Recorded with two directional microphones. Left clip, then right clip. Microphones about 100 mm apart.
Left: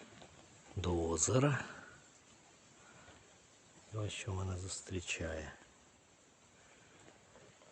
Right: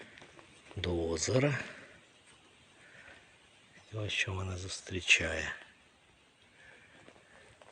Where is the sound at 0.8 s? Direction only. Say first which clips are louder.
Right 2 dB; 15° left (ahead or behind).